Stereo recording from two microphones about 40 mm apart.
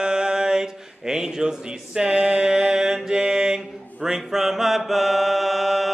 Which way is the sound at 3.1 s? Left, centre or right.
Centre.